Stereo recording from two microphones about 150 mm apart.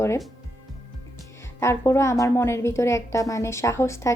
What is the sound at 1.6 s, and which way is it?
A woman's voice, 20° left (ahead or behind).